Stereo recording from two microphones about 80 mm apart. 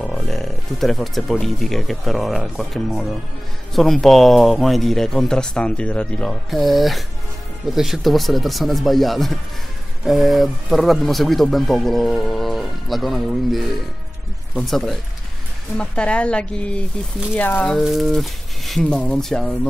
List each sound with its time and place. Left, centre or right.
0.0 s speech: centre
6.5 s speech: centre
15.8 s a woman's voice: centre
17.6 s a woman's voice: centre